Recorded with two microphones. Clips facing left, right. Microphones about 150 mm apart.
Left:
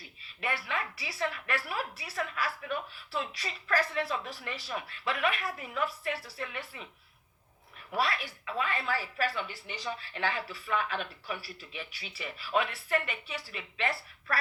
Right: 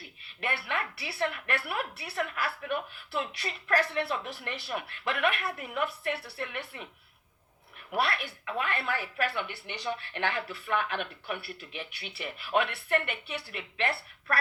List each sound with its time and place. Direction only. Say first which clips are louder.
0.5 s speech: right 3 dB; 65° right (ahead or behind)
7.9 s speech: right 1 dB; 65° right (ahead or behind)
8.9 s a woman's voice: even; 30° left (ahead or behind)
9.3 s speech: right 2 dB; 65° right (ahead or behind)